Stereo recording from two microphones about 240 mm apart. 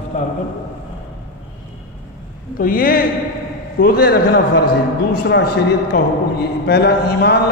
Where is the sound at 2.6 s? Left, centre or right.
Left.